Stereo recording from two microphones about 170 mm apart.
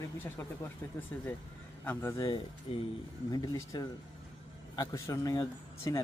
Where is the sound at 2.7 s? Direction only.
35° left (ahead or behind).